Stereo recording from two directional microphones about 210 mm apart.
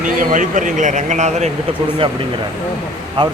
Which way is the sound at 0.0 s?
40° right (ahead or behind).